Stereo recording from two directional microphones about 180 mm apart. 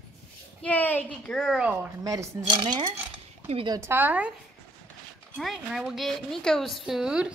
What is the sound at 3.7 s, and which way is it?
Speech, 15° right (ahead or behind).